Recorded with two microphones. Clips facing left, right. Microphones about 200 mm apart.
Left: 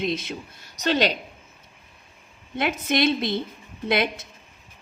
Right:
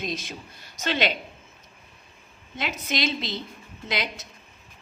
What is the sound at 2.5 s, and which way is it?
A woman's voice, 55° left (ahead or behind).